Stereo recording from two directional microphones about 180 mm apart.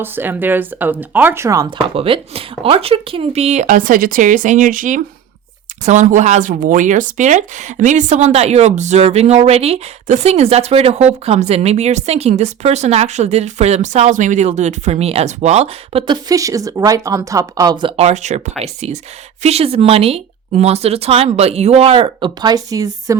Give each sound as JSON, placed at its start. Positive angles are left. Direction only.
{"t": 0.0, "sound": "speech", "side_deg": -10}
{"t": 2.0, "sound": "speech", "side_deg": -30}
{"t": 16.3, "sound": "speech", "side_deg": -20}